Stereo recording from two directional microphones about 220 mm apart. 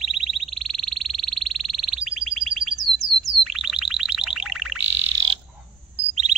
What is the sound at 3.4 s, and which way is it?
Chirp tone, centre (ahead or behind).